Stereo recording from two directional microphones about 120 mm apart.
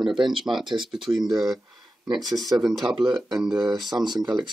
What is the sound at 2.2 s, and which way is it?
Speech, 30° right (ahead or behind).